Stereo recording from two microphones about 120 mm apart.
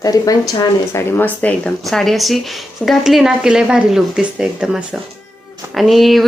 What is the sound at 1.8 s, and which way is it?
Speech, centre (ahead or behind).